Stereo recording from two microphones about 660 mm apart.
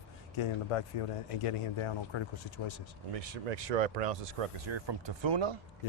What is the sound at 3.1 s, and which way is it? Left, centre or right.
Speech, right.